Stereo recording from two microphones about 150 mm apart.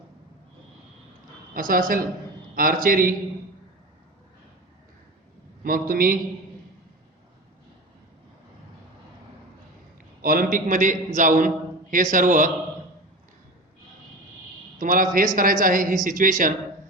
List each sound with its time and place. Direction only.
1.5 s a woman's voice: 70° right (ahead or behind)
5.6 s a woman's voice: 70° right (ahead or behind)
10.2 s a man's voice: 70° right (ahead or behind)
14.8 s a man's voice: 65° right (ahead or behind)